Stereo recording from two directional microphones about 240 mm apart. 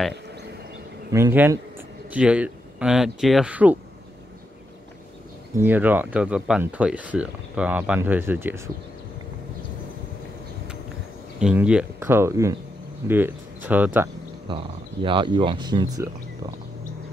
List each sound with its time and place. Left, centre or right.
1.1 s speech: centre
5.6 s speech: centre
11.3 s speech: centre
14.5 s speech: right